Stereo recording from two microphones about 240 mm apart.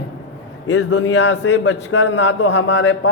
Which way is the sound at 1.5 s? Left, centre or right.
Left.